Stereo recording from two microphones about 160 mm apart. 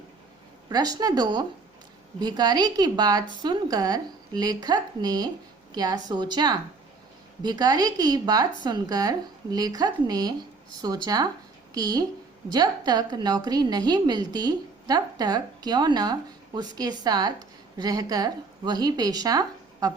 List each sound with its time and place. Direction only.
0.7 s a woman's voice: 25° right (ahead or behind)